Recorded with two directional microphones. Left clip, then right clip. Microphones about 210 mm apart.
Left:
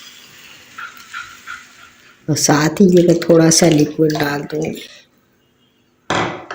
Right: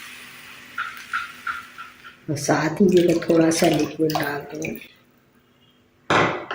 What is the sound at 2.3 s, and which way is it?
Speech, 55° left (ahead or behind).